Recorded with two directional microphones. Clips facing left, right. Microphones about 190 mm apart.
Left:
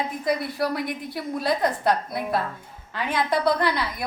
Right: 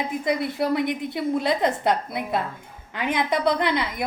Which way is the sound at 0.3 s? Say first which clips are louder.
Right 2 dB; 20° right (ahead or behind).